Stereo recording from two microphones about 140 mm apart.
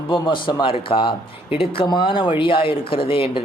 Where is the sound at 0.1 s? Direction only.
35° left (ahead or behind).